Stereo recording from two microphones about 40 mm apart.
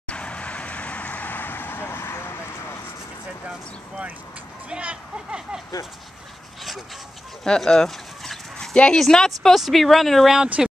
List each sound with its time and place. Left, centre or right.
0.1 s vehicle: left
4.6 s speech: right
7.4 s dog: centre
8.5 s dog: left
9.1 s a woman's voice: centre
9.5 s speech: centre
10.6 s speech: centre